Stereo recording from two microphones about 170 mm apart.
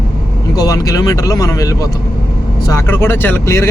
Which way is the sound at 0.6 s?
20° left (ahead or behind).